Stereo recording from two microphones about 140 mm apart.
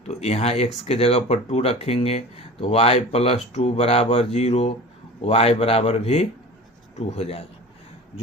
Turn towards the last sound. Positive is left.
turn(degrees=50)  # may be behind; listen again after turning